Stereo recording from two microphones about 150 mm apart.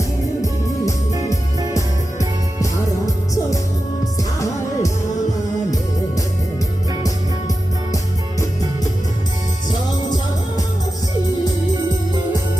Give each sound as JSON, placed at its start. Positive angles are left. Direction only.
{"t": 1.7, "sound": "music", "side_deg": 20}
{"t": 4.0, "sound": "music", "side_deg": 20}
{"t": 7.9, "sound": "music", "side_deg": 20}